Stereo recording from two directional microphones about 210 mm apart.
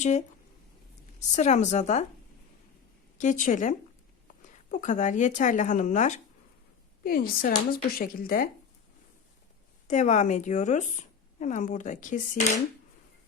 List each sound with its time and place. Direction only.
0.0 s speech: 35° left (ahead or behind)
1.4 s speech: 35° left (ahead or behind)
3.2 s speech: 35° left (ahead or behind)
9.8 s speech: 35° left (ahead or behind)